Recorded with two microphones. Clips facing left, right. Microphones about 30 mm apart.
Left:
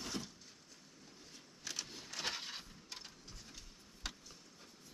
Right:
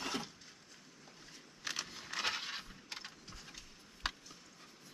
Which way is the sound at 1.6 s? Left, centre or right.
Right.